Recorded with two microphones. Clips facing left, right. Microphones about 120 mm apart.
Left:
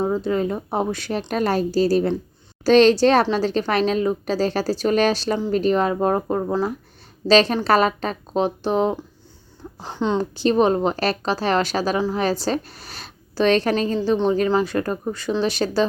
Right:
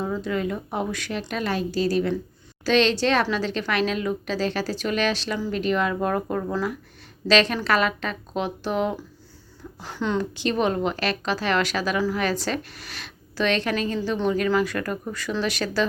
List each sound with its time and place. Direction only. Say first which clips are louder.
0.0 s a woman's voice: left 5 dB; 35° left (ahead or behind)
10.3 s speech: left 6 dB; 35° left (ahead or behind)